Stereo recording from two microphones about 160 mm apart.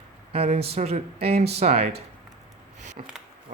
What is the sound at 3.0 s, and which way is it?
Speech, 45° right (ahead or behind).